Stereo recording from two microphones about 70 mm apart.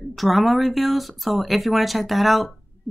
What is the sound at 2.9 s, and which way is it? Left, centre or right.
Heart sounds, centre.